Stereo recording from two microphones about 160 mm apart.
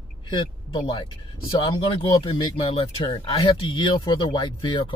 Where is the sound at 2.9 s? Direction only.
25° left (ahead or behind).